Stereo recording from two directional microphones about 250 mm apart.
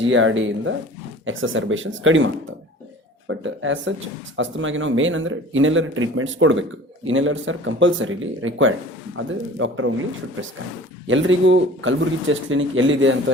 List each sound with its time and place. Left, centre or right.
0.0 s speech: right
11.0 s speech: right